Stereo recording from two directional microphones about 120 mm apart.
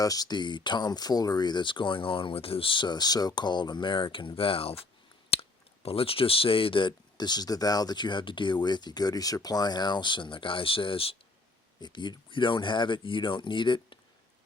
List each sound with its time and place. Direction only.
0.0 s speech: 30° left (ahead or behind)